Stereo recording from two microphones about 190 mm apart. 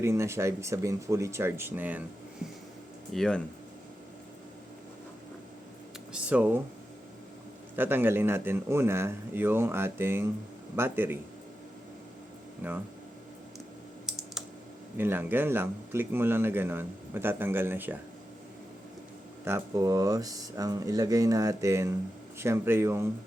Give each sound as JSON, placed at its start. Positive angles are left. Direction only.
{"t": 0.0, "sound": "speech", "side_deg": -15}
{"t": 3.1, "sound": "speech", "side_deg": 5}
{"t": 6.1, "sound": "speech", "side_deg": -5}
{"t": 7.8, "sound": "speech", "side_deg": -10}
{"t": 12.6, "sound": "speech", "side_deg": -10}
{"t": 14.9, "sound": "speech", "side_deg": -10}
{"t": 19.5, "sound": "speech", "side_deg": -15}